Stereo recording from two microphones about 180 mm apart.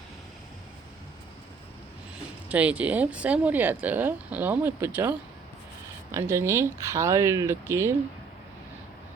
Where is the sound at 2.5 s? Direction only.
5° right (ahead or behind).